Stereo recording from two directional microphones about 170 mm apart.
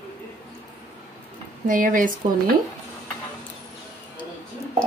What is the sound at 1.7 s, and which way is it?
Speech, 50° right (ahead or behind).